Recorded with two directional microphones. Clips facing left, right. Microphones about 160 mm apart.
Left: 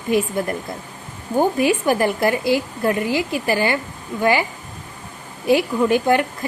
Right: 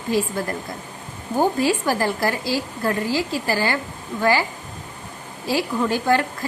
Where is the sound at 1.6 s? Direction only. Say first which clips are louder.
Left 3 dB; 20° left (ahead or behind).